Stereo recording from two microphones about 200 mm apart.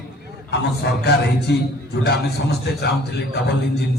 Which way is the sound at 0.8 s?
55° left (ahead or behind).